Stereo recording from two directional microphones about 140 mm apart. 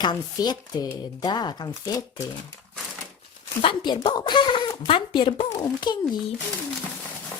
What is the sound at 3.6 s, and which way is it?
Speech, 35° left (ahead or behind).